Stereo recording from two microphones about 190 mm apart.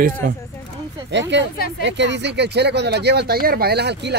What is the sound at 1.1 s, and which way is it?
Speech, 65° right (ahead or behind).